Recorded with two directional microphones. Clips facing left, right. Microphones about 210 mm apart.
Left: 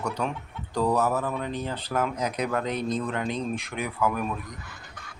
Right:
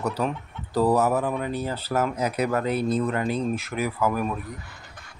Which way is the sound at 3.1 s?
5° right (ahead or behind).